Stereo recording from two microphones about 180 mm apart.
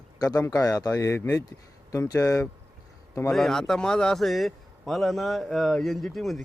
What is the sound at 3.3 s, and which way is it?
Speech, centre (ahead or behind).